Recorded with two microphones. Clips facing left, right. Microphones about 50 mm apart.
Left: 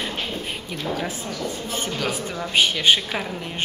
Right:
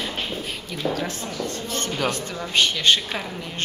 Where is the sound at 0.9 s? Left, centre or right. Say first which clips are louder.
Even; centre.